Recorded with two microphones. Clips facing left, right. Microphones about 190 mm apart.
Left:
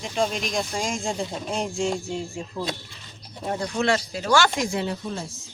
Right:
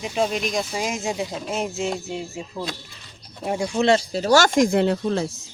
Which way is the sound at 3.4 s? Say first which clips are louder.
Right 4 dB; 10° right (ahead or behind).